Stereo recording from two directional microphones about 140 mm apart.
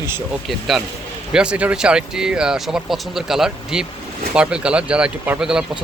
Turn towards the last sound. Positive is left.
turn(degrees=-5)  # may be behind; listen again after turning